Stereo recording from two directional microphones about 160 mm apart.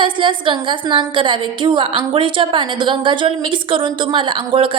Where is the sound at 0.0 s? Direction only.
30° right (ahead or behind).